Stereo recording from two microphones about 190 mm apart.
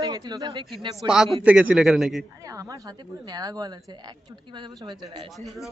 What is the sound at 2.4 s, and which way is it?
A woman's voice, 15° right (ahead or behind).